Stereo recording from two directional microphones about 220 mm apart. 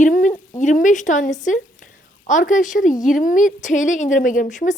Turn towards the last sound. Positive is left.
turn(degrees=35)  # may be behind; listen again after turning